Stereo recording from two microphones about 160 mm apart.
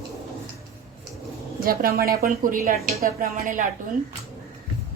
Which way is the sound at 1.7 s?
65° right (ahead or behind).